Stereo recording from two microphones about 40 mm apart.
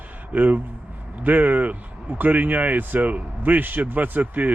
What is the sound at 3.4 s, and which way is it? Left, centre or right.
Speech, right.